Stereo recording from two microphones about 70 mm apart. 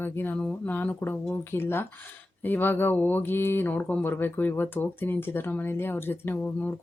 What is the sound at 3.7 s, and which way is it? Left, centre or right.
Speech, left.